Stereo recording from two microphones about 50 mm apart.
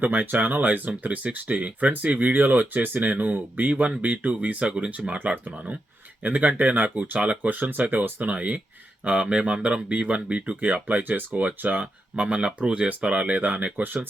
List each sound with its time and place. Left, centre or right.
0.0 s speech: right